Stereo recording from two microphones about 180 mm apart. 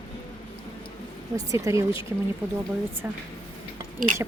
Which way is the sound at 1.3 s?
15° right (ahead or behind).